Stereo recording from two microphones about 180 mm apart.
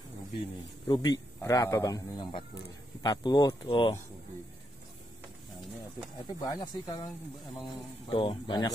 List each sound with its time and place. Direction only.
0.8 s a man's voice: 25° left (ahead or behind)
6.2 s a man's voice: 20° left (ahead or behind)
8.1 s a man's voice: 25° left (ahead or behind)